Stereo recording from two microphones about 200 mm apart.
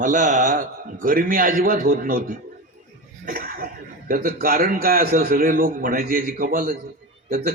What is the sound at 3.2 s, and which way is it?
Cough, 50° right (ahead or behind).